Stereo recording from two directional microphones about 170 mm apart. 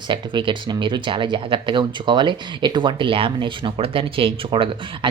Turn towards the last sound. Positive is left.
turn(degrees=-30)  # may be behind; listen again after turning